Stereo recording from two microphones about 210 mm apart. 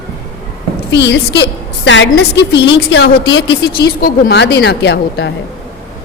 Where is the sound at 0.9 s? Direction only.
55° left (ahead or behind).